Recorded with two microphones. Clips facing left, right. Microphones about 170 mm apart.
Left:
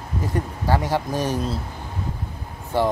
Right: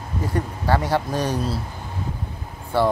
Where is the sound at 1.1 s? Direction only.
15° right (ahead or behind).